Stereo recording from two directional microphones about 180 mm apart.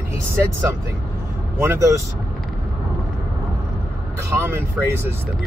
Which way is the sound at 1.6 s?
15° right (ahead or behind).